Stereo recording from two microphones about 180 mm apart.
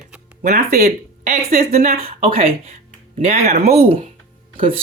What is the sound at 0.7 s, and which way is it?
Speech, 60° right (ahead or behind).